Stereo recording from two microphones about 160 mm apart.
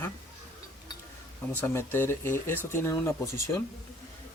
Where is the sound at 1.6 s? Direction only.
15° left (ahead or behind).